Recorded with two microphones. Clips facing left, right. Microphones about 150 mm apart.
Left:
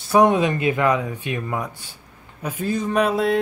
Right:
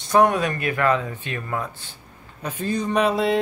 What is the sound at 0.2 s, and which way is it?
Speech, 20° left (ahead or behind).